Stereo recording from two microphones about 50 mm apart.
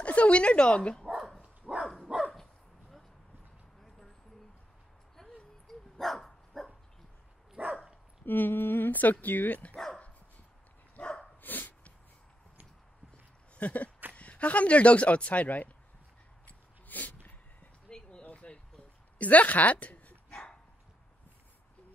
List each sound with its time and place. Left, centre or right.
0.0 s speech: left
1.6 s dog: centre
2.1 s dog: centre
5.9 s dog: centre
7.6 s dog: right
8.3 s speech: left
11.0 s dog: centre
11.4 s dog: left
13.6 s a sound: left
14.1 s speech: left
16.4 s a sound: left
17.8 s a sound: centre
19.1 s bow-wow: left